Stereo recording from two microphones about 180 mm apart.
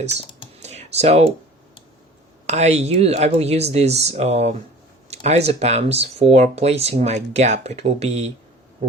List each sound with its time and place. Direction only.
0.6 s computer keyboard: 35° right (ahead or behind)
2.5 s speech: 35° right (ahead or behind)